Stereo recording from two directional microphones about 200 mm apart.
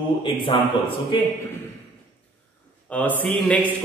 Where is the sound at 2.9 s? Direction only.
10° left (ahead or behind).